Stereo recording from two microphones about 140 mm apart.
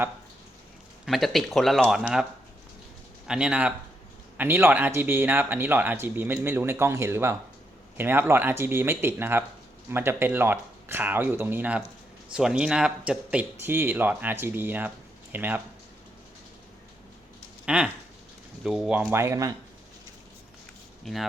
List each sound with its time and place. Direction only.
1.0 s speech: centre (ahead or behind)
3.2 s speech: 5° right (ahead or behind)
17.7 s speech: 5° right (ahead or behind)
19.2 s speech: 25° right (ahead or behind)
21.0 s speech: centre (ahead or behind)